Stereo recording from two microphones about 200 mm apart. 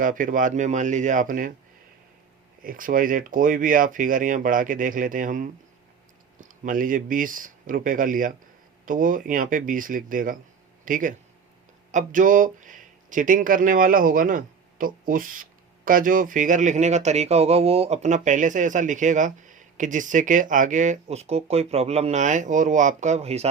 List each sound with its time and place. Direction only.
0.0 s speech: 40° right (ahead or behind)
2.6 s speech: 45° right (ahead or behind)